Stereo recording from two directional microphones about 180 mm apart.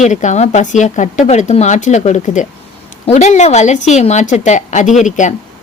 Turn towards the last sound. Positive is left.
turn(degrees=45)  # may be behind; listen again after turning